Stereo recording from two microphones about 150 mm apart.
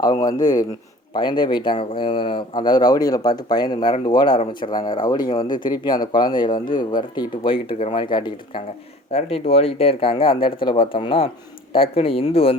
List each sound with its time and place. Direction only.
0.0 s speech: 25° left (ahead or behind)
9.1 s speech: 45° left (ahead or behind)